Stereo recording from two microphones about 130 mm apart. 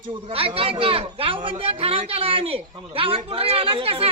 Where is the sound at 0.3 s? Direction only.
45° right (ahead or behind).